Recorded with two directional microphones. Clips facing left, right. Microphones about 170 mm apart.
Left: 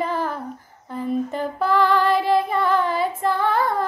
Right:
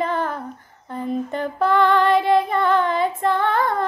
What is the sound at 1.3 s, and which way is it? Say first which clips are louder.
Child singing: right 5 dB; 5° left (ahead or behind).